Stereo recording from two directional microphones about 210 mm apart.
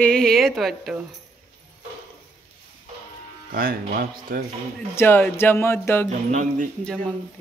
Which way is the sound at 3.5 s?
45° right (ahead or behind).